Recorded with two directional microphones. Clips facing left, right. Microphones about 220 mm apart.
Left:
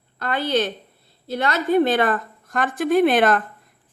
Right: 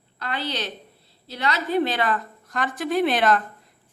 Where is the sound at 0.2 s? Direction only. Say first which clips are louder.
Left 8 dB; 50° left (ahead or behind).